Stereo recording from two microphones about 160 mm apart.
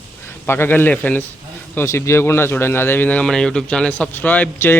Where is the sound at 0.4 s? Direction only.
15° left (ahead or behind).